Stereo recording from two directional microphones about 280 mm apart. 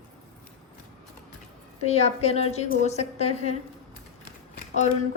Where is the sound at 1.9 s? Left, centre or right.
Left.